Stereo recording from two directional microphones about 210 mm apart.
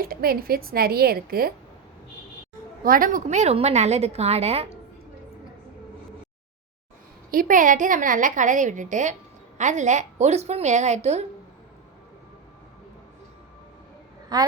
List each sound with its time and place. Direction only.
0.0 s a woman's voice: 45° right (ahead or behind)
2.8 s a woman's voice: 40° right (ahead or behind)
7.3 s a woman's voice: 40° right (ahead or behind)
14.3 s a woman's voice: 20° right (ahead or behind)